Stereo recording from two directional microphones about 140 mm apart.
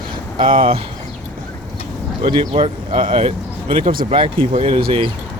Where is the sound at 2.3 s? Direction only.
35° right (ahead or behind).